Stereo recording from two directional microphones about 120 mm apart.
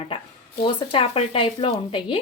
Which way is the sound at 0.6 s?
50° left (ahead or behind).